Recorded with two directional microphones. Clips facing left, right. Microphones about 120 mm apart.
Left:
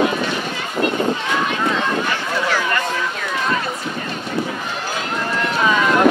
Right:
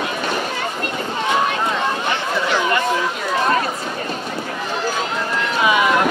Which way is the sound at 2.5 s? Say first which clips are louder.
Right 2 dB; 20° right (ahead or behind).